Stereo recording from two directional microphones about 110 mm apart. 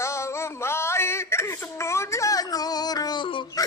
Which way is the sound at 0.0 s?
25° left (ahead or behind).